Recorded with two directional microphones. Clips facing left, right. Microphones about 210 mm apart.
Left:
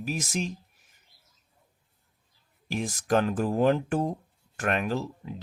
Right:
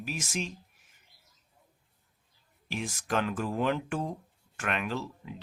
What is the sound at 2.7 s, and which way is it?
Speech, 40° left (ahead or behind).